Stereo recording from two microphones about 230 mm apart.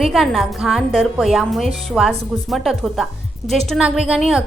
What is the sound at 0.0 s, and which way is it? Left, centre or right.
A woman's voice, centre.